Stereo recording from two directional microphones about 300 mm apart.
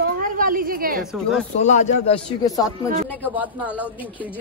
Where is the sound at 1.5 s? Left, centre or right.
Left.